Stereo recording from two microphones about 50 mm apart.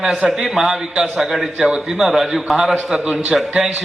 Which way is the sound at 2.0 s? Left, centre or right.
Centre.